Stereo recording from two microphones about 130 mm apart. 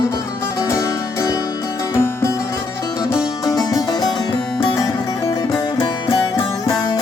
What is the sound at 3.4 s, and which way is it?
Music, 30° left (ahead or behind).